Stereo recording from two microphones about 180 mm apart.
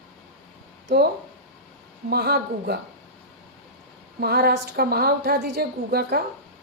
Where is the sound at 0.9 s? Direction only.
60° right (ahead or behind).